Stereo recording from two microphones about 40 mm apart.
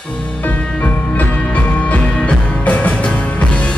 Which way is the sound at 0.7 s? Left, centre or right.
Left.